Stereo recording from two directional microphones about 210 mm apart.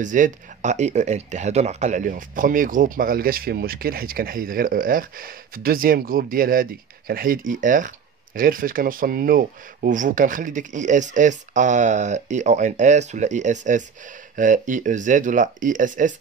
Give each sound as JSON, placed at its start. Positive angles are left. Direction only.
{"t": 0.0, "sound": "speech", "side_deg": -35}